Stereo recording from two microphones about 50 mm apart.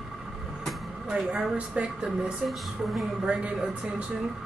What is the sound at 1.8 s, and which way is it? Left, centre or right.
Speech, right.